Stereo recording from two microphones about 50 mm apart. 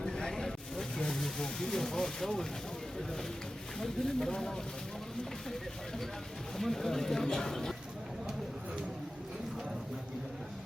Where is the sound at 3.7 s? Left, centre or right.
Centre.